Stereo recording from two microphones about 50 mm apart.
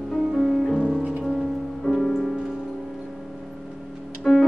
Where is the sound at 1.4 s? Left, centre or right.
Centre.